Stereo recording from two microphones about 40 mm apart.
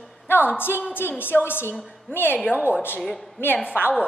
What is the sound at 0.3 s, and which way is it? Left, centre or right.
A woman's voice, left.